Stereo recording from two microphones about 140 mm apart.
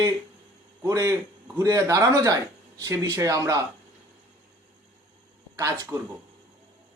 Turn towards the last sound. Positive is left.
turn(degrees=-25)  # may be behind; listen again after turning